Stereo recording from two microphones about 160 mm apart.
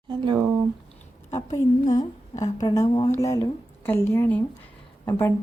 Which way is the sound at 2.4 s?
20° left (ahead or behind).